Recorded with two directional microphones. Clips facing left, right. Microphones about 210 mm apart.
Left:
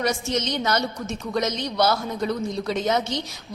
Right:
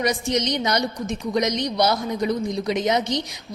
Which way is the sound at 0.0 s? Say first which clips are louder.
Right 2 dB; 15° right (ahead or behind).